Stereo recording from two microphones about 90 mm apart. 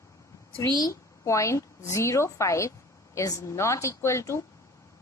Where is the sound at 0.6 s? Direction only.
50° left (ahead or behind).